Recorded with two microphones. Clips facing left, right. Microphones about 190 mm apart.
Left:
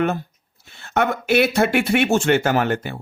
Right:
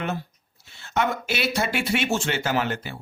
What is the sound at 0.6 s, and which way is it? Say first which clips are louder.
Speech: left 4 dB; 55° left (ahead or behind).